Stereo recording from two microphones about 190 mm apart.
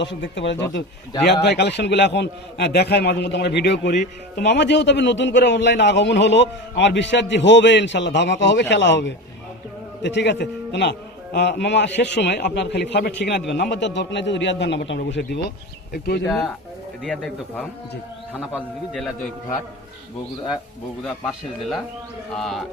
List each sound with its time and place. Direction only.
0.0 s a man's voice: 70° left (ahead or behind)
16.2 s speech: 5° left (ahead or behind)
21.0 s speech: centre (ahead or behind)